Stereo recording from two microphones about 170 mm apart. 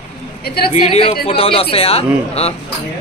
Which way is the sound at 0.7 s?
35° left (ahead or behind).